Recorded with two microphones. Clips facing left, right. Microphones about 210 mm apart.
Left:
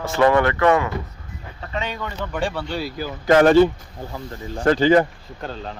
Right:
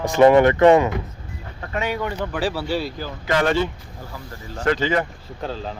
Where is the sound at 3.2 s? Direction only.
45° left (ahead or behind).